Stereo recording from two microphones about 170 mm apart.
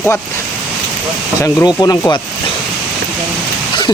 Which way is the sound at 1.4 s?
20° left (ahead or behind).